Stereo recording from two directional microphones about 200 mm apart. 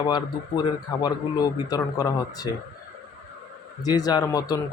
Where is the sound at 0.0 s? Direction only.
20° left (ahead or behind).